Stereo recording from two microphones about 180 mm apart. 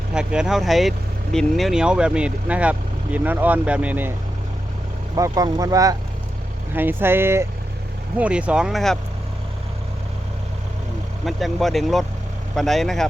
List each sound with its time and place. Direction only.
0.1 s speech: 5° right (ahead or behind)
5.1 s speech: 20° right (ahead or behind); by 9.0 s centre (ahead or behind)
11.3 s speech: centre (ahead or behind)